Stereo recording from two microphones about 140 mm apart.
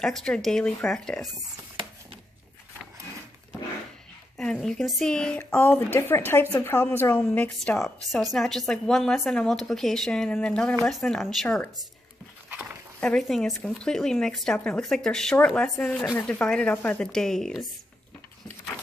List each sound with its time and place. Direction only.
0.0 s a woman's voice: 5° left (ahead or behind)
4.4 s a woman's voice: 5° left (ahead or behind)
13.0 s a woman's voice: 5° left (ahead or behind)